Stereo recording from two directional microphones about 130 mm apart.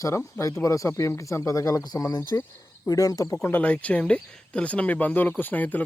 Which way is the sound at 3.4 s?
15° left (ahead or behind).